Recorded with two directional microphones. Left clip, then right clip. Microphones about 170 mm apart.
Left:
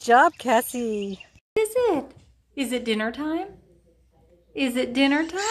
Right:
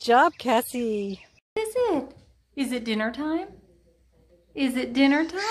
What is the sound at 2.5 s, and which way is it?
Speech, centre (ahead or behind).